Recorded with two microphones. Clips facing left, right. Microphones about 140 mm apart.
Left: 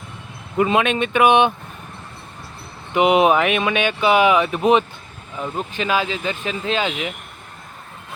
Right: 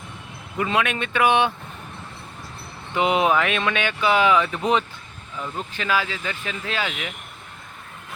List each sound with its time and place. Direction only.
0.5 s speech: 25° left (ahead or behind)
2.9 s speech: 20° left (ahead or behind)